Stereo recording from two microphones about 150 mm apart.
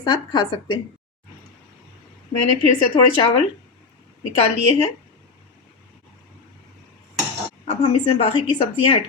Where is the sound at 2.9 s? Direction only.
25° left (ahead or behind).